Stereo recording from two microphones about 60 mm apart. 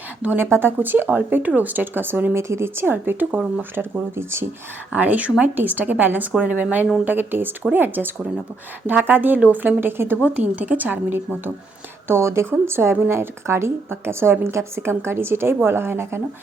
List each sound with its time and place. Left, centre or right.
0.2 s a woman's voice: right
2.3 s speech: right
4.9 s speech: right
12.0 s a woman's voice: right